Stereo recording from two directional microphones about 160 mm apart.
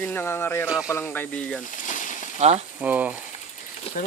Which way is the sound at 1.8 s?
55° left (ahead or behind).